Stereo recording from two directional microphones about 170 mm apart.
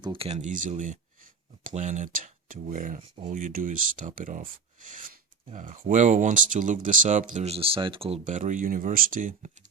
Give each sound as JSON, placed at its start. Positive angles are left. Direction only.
{"t": 0.0, "sound": "speech", "side_deg": -30}
{"t": 8.2, "sound": "speech", "side_deg": -45}